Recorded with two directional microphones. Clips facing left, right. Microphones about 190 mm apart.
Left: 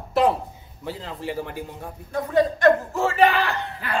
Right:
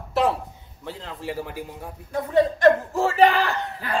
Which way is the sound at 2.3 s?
35° right (ahead or behind).